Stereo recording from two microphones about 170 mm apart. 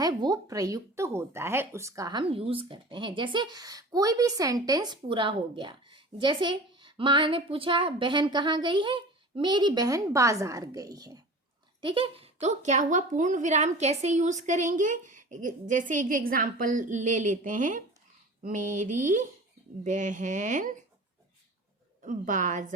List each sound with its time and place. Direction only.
0.0 s a woman's voice: 25° right (ahead or behind); by 20.7 s 45° right (ahead or behind)
22.0 s a woman's voice: 50° right (ahead or behind)